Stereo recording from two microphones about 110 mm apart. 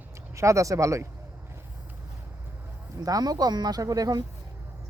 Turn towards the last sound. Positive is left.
turn(degrees=-35)  # may be behind; listen again after turning